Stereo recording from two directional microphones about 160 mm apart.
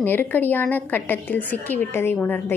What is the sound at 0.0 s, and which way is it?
A woman's voice, 10° left (ahead or behind).